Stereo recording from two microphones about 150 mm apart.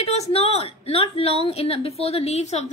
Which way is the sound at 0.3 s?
40° left (ahead or behind).